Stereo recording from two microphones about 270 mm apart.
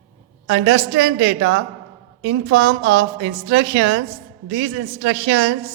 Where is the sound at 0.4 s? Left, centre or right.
Right.